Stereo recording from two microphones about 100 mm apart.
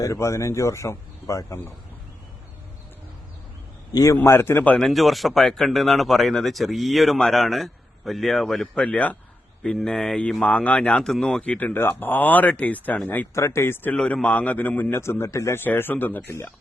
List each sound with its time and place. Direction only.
0.0 s a man's voice: 35° left (ahead or behind)
3.9 s a man's voice: 30° left (ahead or behind)
4.8 s a man's voice: centre (ahead or behind); by 13.9 s 25° left (ahead or behind)
13.9 s a man's voice: 10° left (ahead or behind)